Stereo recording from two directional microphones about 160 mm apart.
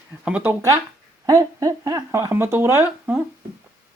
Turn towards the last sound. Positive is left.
turn(degrees=-15)  # may be behind; listen again after turning